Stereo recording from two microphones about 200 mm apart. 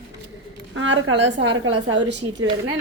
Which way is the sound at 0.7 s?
70° right (ahead or behind).